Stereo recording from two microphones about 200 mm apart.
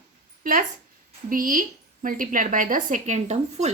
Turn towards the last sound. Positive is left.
turn(degrees=-35)  # may be behind; listen again after turning